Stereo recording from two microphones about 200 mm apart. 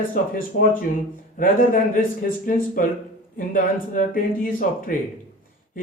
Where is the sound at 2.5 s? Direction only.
40° left (ahead or behind).